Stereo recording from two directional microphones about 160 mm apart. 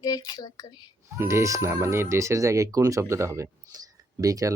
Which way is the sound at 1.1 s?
15° right (ahead or behind).